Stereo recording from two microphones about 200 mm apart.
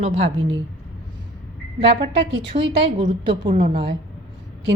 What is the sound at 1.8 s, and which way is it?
A woman's voice, 25° right (ahead or behind).